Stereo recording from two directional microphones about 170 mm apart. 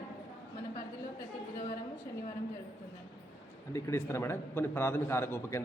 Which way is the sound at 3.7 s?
15° left (ahead or behind).